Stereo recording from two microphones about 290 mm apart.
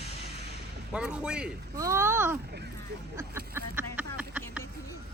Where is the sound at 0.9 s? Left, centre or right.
Centre.